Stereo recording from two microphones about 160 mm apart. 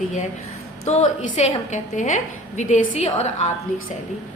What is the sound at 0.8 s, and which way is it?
A woman's voice, 50° left (ahead or behind).